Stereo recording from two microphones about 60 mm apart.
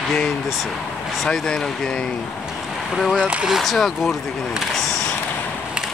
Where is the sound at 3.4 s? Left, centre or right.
Centre.